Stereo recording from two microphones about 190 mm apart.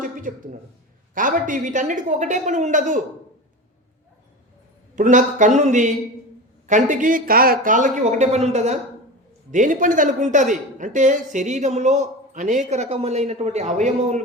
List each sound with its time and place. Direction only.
0.0 s a sound: 45° right (ahead or behind)
1.1 s a woman's voice: 45° right (ahead or behind)
4.9 s a woman's voice: 45° right (ahead or behind)